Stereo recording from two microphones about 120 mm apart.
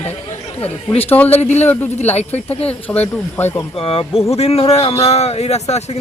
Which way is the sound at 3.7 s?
50° left (ahead or behind).